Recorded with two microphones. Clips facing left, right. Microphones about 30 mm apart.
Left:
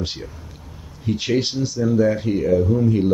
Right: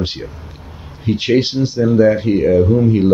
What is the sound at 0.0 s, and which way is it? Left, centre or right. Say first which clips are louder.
Speech: right 6 dB; right.